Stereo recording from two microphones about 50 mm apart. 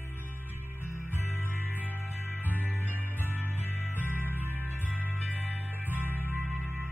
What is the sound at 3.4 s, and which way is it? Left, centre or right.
Music, left.